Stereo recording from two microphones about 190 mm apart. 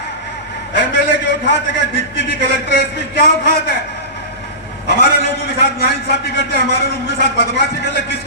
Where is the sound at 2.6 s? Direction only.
55° left (ahead or behind).